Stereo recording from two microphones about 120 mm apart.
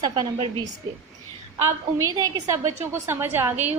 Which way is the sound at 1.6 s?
30° right (ahead or behind).